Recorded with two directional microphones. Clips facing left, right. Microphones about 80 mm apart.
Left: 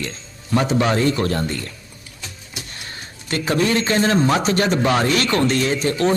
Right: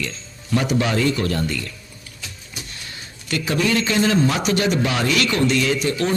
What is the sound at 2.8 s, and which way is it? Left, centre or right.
Speech, left.